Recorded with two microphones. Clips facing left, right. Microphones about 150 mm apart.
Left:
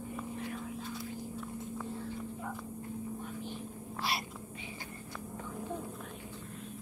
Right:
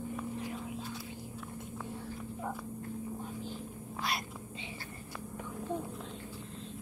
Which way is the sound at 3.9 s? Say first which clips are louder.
Even; centre (ahead or behind).